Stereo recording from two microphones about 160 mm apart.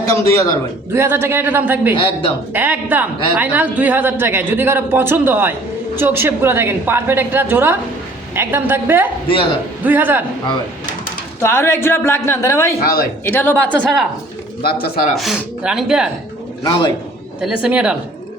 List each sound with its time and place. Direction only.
0.0 s a sound: 15° left (ahead or behind)
0.9 s a man's voice: 15° right (ahead or behind)
9.2 s a man's voice: 35° left (ahead or behind)
9.8 s a man's voice: 10° right (ahead or behind)
11.4 s speech: 15° left (ahead or behind)
12.8 s speech: 65° left (ahead or behind)
13.3 s speech: 10° left (ahead or behind)
14.6 s speech: 75° left (ahead or behind)
15.1 s speech: centre (ahead or behind)
17.4 s a man's voice: 5° right (ahead or behind)